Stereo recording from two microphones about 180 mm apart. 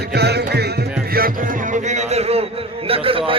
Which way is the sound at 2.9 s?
30° right (ahead or behind).